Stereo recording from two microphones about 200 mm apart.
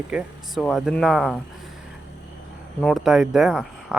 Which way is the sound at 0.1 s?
5° right (ahead or behind).